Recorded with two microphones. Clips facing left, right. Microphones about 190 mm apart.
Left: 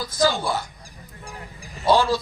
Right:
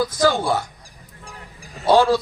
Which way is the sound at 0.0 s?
55° right (ahead or behind).